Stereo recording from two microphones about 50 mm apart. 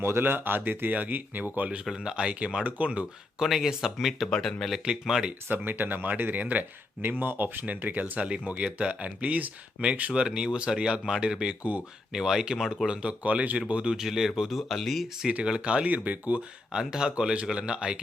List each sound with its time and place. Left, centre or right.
0.0 s speech: right
1.8 s speech: centre
3.4 s speech: centre
4.3 s speech: centre
4.9 s speech: centre
5.5 s speech: right; by 12.9 s centre
12.9 s speech: right
13.9 s speech: centre
15.4 s speech: right
15.9 s speech: right
16.7 s speech: centre